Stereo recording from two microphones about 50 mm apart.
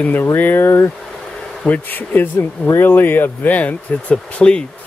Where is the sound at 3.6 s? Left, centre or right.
Left.